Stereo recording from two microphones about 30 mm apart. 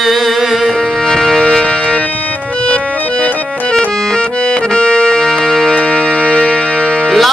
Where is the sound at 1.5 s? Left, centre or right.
Left.